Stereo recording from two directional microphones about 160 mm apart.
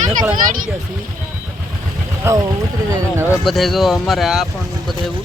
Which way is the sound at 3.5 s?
Centre (ahead or behind).